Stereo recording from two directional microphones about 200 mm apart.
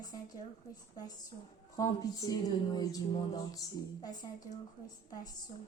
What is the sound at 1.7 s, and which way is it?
Speech, 20° left (ahead or behind).